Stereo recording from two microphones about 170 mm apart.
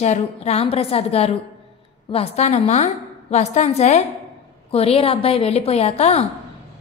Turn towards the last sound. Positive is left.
turn(degrees=40)  # may be behind; listen again after turning